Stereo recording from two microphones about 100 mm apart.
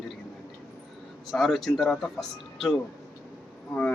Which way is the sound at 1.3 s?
Centre (ahead or behind).